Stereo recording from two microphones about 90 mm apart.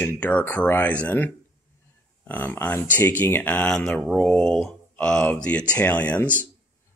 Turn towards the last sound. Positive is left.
turn(degrees=20)  # may be behind; listen again after turning